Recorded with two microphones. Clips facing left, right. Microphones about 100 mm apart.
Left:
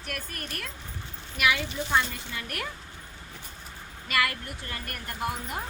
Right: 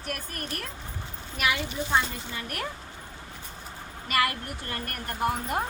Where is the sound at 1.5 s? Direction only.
20° right (ahead or behind).